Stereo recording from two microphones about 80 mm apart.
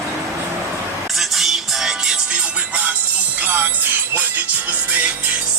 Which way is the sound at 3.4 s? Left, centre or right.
Right.